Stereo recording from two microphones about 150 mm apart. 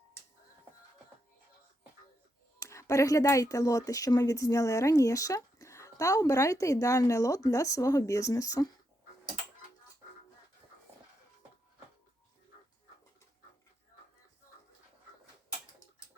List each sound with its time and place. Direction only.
2.6 s speech: 20° left (ahead or behind)